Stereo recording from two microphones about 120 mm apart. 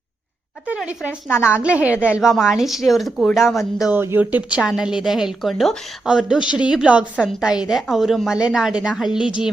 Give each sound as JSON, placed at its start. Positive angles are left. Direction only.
{"t": 0.8, "sound": "speech", "side_deg": -10}
{"t": 1.3, "sound": "a woman's voice", "side_deg": 20}
{"t": 1.6, "sound": "speech", "side_deg": -10}
{"t": 2.0, "sound": "a woman's voice", "side_deg": 20}
{"t": 2.2, "sound": "a woman's voice", "side_deg": -5}
{"t": 3.9, "sound": "a woman's voice", "side_deg": -20}